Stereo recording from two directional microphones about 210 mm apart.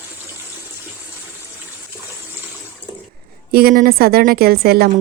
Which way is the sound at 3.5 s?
45° right (ahead or behind).